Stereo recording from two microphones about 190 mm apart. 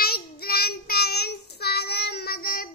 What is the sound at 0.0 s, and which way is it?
Child singing, 55° left (ahead or behind).